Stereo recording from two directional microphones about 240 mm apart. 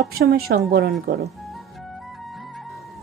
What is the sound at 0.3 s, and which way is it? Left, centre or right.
Speech, right.